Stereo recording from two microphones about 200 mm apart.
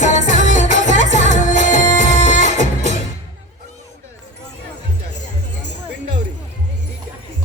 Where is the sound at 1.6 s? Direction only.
40° left (ahead or behind).